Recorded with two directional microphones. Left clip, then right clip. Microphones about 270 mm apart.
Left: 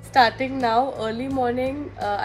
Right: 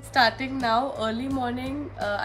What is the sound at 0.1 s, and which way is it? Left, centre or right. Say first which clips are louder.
A woman's voice: left 4 dB; centre.